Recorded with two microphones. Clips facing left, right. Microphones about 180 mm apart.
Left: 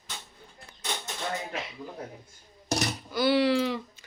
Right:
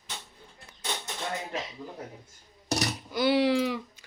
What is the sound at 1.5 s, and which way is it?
Speech, 40° right (ahead or behind).